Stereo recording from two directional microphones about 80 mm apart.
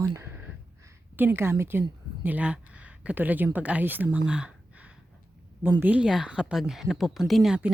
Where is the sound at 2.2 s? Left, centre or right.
Centre.